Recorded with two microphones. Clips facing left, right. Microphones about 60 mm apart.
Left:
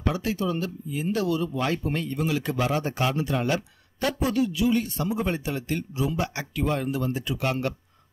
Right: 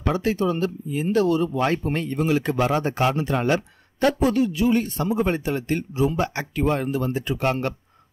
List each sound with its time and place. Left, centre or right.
0.0 s speech: right